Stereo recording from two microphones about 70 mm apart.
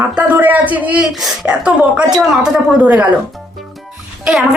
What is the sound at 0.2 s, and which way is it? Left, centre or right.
A man's voice, right.